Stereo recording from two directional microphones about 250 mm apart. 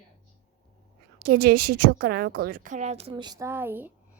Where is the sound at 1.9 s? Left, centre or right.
Right.